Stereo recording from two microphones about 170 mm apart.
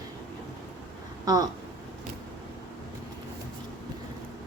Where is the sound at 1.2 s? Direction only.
20° right (ahead or behind).